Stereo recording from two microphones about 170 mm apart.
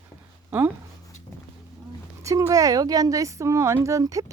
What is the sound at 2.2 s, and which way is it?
A woman's voice, 20° right (ahead or behind).